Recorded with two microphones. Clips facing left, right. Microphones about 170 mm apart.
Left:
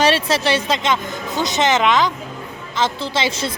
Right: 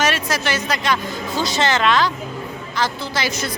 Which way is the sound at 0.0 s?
30° left (ahead or behind).